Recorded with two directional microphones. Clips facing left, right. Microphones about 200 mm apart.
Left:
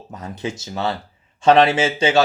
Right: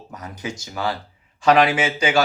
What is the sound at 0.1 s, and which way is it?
Speech, 25° left (ahead or behind).